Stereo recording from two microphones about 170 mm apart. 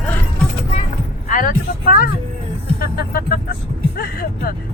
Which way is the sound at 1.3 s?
55° left (ahead or behind).